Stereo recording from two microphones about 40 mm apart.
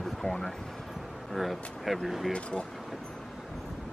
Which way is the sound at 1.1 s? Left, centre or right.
Centre.